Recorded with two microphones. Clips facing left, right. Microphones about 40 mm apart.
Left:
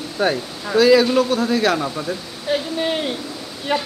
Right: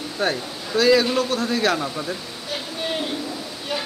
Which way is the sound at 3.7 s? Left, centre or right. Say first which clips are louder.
Left 7 dB; left.